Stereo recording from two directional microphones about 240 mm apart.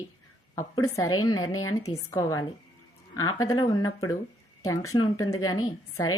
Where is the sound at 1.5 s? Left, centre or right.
Left.